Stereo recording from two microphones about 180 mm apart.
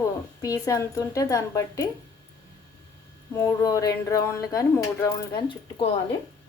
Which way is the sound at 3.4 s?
20° left (ahead or behind).